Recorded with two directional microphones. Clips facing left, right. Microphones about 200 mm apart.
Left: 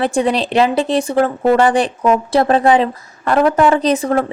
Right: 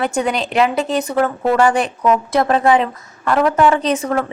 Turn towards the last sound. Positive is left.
turn(degrees=35)  # may be behind; listen again after turning